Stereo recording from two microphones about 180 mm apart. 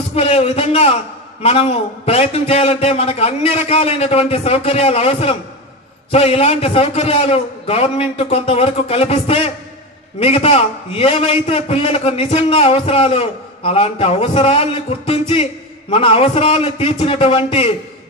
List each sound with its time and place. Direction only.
0.1 s a man's voice: 35° left (ahead or behind)